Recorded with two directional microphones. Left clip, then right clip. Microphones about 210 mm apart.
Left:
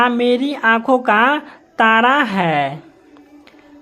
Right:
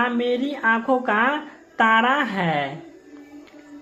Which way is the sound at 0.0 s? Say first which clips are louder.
Left 7 dB; 45° left (ahead or behind).